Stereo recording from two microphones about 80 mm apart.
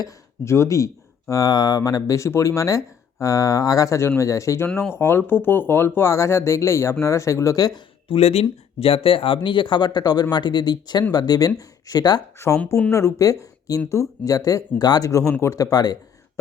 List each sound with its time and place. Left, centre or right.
0.4 s speech: left
4.8 s speech: left
8.1 s speech: left
9.3 s speech: left
12.9 s speech: left
15.1 s speech: left
15.5 s speech: left